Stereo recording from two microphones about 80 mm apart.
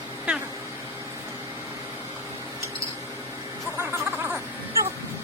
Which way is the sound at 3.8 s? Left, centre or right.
Right.